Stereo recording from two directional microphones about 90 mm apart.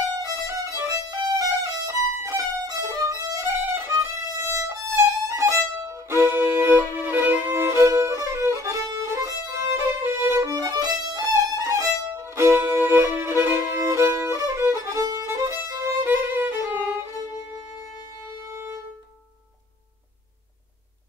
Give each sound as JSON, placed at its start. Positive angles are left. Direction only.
{"t": 0.2, "sound": "violin", "side_deg": -40}
{"t": 16.1, "sound": "violin", "side_deg": -20}
{"t": 18.5, "sound": "violin", "side_deg": -25}